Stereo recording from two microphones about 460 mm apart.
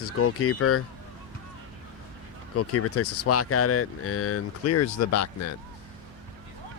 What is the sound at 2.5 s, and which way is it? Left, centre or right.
Speech, left.